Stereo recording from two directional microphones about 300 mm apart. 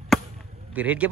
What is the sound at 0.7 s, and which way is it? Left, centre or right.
Speech, centre.